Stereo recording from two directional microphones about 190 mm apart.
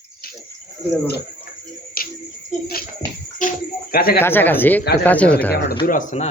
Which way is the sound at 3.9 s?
50° left (ahead or behind).